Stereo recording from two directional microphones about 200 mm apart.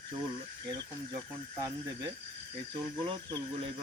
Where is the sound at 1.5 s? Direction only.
15° right (ahead or behind).